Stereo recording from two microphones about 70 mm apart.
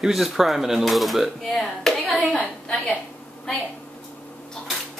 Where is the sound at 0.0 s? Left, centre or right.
Centre.